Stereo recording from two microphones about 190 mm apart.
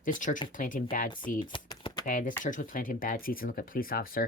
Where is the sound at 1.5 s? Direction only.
25° left (ahead or behind).